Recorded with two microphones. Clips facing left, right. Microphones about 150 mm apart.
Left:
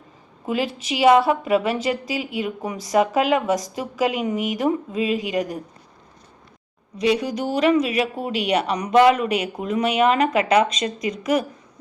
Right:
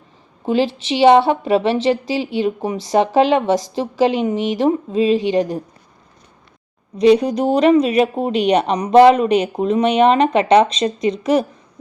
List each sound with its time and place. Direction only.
0.4 s a woman's voice: 30° right (ahead or behind)
7.0 s a woman's voice: 35° right (ahead or behind)